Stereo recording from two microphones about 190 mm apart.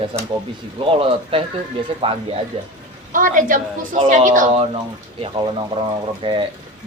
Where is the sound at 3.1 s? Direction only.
45° right (ahead or behind).